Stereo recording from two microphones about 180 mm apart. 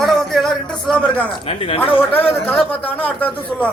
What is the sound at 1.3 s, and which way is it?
Speech, 30° left (ahead or behind).